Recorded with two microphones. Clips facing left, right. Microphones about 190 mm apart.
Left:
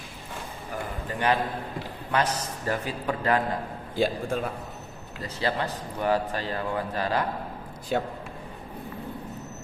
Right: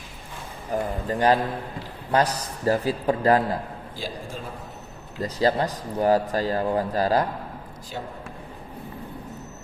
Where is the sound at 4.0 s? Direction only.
60° left (ahead or behind).